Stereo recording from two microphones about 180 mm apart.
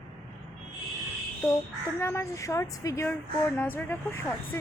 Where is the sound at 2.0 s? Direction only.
15° left (ahead or behind).